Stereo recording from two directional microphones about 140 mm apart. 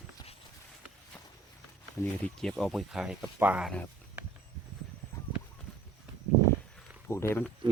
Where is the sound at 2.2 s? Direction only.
5° left (ahead or behind).